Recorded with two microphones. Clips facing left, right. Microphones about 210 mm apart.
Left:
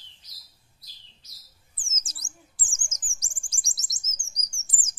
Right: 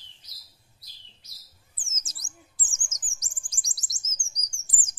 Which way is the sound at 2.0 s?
30° left (ahead or behind).